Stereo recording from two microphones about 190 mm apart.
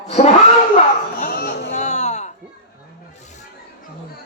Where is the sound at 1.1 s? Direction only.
55° left (ahead or behind).